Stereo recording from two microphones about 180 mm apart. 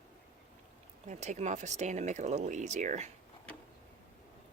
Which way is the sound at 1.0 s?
40° right (ahead or behind).